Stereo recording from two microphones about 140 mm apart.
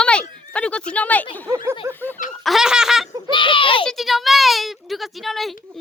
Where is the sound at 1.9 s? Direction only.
15° left (ahead or behind).